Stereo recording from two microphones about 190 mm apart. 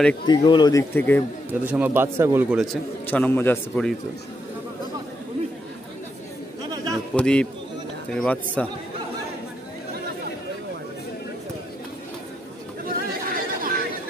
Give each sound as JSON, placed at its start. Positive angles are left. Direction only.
{"t": 0.3, "sound": "a man's voice", "side_deg": 25}
{"t": 1.5, "sound": "a man's voice", "side_deg": -10}
{"t": 2.6, "sound": "a man's voice", "side_deg": 5}
{"t": 6.7, "sound": "a sound", "side_deg": -20}
{"t": 7.2, "sound": "speech", "side_deg": 5}
{"t": 12.8, "sound": "chatter", "side_deg": -50}